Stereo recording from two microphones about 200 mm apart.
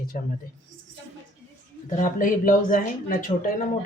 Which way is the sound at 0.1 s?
45° left (ahead or behind).